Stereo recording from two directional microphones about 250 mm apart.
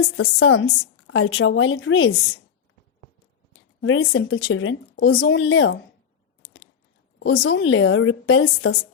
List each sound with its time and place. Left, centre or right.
0.3 s a woman's voice: left
3.8 s a woman's voice: left
7.2 s a woman's voice: left